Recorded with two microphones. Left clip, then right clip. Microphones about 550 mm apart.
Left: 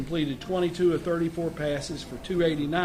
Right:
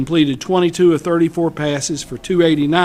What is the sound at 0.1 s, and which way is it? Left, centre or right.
A man's voice, right.